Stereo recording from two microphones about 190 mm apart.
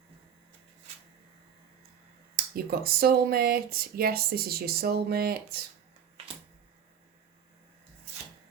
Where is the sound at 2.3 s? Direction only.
55° right (ahead or behind).